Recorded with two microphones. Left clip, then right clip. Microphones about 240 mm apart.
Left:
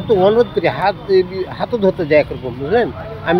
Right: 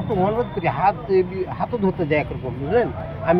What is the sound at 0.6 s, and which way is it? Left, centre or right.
Speech, centre.